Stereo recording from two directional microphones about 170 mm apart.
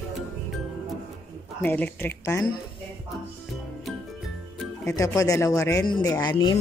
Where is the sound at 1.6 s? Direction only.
10° left (ahead or behind).